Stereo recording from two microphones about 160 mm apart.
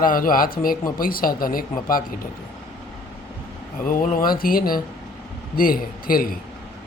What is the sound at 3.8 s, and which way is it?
Speech, 60° left (ahead or behind).